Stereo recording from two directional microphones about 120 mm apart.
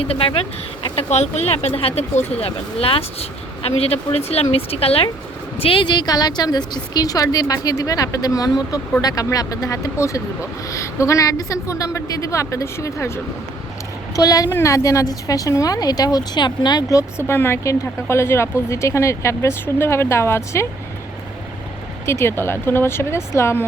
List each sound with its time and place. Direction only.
0.0 s speech: 50° left (ahead or behind)
1.1 s a woman's voice: 65° left (ahead or behind); by 13.1 s 25° left (ahead or behind)
14.2 s a woman's voice: 30° left (ahead or behind)
22.0 s a woman's voice: 20° left (ahead or behind)